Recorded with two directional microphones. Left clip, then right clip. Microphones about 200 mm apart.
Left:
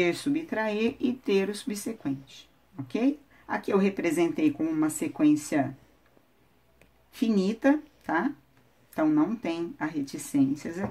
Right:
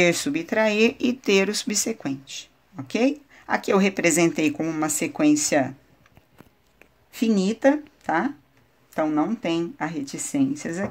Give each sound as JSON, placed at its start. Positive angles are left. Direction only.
{"t": 0.0, "sound": "speech", "side_deg": -50}
{"t": 7.1, "sound": "speech", "side_deg": -45}